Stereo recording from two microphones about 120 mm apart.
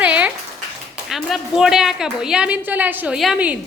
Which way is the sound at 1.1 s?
Centre (ahead or behind).